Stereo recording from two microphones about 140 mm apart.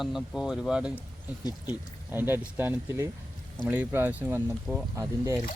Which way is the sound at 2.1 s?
15° right (ahead or behind).